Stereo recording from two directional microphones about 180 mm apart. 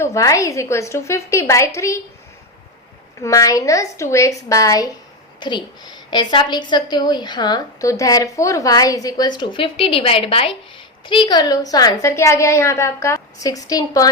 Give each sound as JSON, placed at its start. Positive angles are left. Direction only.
{"t": 0.0, "sound": "a woman's voice", "side_deg": 15}
{"t": 3.2, "sound": "a woman's voice", "side_deg": 20}